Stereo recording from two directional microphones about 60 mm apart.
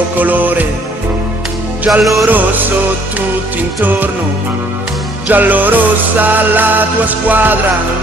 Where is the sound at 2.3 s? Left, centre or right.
Right.